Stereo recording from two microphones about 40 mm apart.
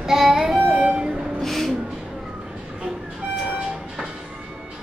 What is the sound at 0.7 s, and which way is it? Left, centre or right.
Violin, right.